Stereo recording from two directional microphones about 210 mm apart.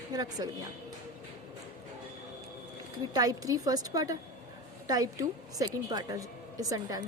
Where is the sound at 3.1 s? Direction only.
15° right (ahead or behind).